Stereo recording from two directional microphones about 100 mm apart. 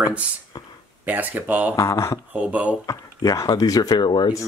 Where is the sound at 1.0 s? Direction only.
20° right (ahead or behind).